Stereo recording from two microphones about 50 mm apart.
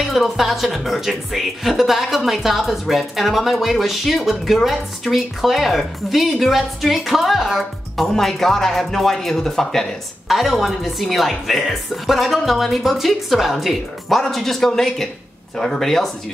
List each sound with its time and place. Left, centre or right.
0.0 s speech: centre
10.2 s speech: centre